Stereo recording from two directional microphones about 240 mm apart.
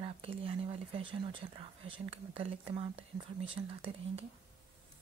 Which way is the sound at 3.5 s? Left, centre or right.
Right.